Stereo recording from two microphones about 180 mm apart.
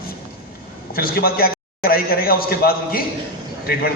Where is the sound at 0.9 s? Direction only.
55° left (ahead or behind).